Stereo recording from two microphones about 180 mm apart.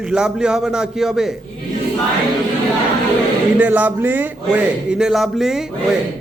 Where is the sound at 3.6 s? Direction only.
10° right (ahead or behind).